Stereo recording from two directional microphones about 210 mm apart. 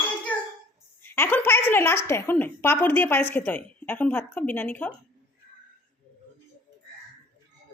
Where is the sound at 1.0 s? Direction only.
10° left (ahead or behind).